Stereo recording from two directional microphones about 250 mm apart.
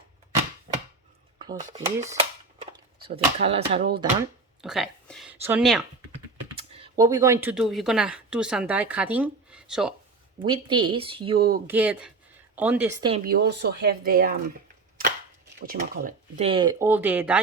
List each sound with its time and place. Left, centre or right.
1.4 s speech: centre
4.2 s speech: centre
6.1 s speech: right; by 9.9 s centre
10.4 s speech: centre
11.3 s speech: right
11.6 s speech: centre
13.0 s speech: right
13.2 s speech: right
15.6 s speech: right; by 17.4 s centre